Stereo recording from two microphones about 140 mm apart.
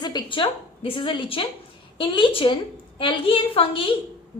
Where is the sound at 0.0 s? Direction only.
30° left (ahead or behind).